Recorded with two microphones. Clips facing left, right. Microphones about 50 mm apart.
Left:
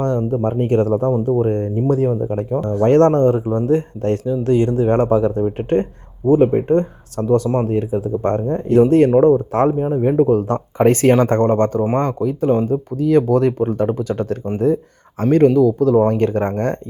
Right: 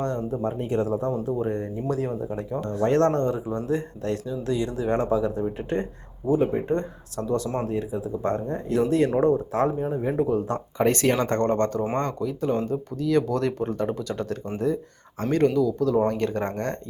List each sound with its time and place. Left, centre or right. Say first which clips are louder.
0.0 s speech: left 8 dB; left